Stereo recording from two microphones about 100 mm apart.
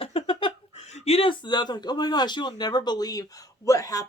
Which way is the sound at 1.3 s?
50° left (ahead or behind).